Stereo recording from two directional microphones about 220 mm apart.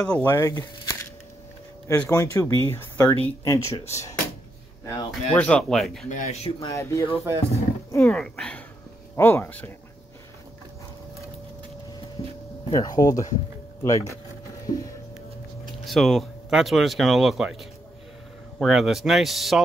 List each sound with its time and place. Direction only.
0.0 s speech: 10° left (ahead or behind)
6.0 s speech: 35° left (ahead or behind)
6.6 s speech: 15° left (ahead or behind)
7.9 s roaring cats: 10° left (ahead or behind)
9.1 s speech: 10° left (ahead or behind)
12.7 s speech: 15° left (ahead or behind)
14.7 s speech: 40° left (ahead or behind)
15.8 s speech: centre (ahead or behind)